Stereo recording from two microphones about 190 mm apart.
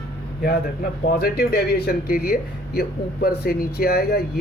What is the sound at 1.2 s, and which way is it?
Speech, 55° left (ahead or behind).